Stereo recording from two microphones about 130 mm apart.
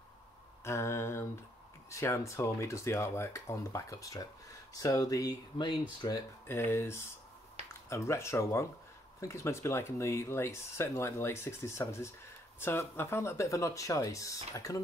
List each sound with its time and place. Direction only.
0.7 s a sound: 20° left (ahead or behind)
1.9 s speech: 20° left (ahead or behind)
6.4 s speech: 20° left (ahead or behind)